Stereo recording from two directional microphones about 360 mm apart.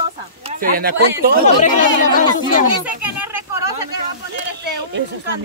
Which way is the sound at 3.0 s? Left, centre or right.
Centre.